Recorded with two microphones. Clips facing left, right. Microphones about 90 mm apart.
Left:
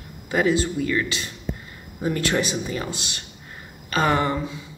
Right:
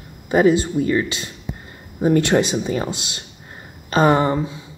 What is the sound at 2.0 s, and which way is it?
Speech, 35° right (ahead or behind).